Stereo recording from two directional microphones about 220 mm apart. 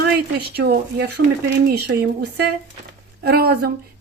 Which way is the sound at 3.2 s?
45° right (ahead or behind).